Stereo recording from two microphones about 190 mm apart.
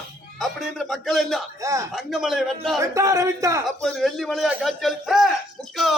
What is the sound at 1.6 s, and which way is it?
Speech, 15° right (ahead or behind).